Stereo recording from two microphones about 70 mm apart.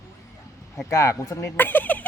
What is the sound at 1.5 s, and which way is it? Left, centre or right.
Speech, left.